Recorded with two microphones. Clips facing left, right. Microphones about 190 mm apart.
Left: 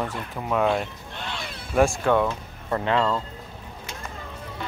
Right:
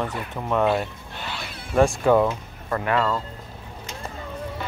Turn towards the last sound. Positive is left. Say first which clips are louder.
# even
turn(degrees=20)  # may be behind; listen again after turning